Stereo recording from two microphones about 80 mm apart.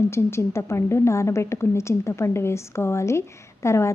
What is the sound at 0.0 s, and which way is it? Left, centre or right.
Speech, left.